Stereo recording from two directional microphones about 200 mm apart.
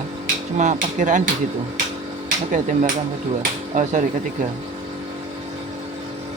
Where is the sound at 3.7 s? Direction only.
40° right (ahead or behind).